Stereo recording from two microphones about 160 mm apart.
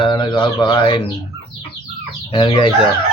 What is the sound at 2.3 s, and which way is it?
Speech, 30° left (ahead or behind).